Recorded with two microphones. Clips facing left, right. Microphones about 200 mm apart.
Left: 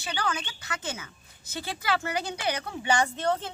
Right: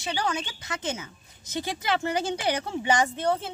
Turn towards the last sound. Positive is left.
turn(degrees=-10)  # may be behind; listen again after turning